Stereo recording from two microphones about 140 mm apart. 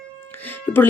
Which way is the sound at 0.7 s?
15° left (ahead or behind).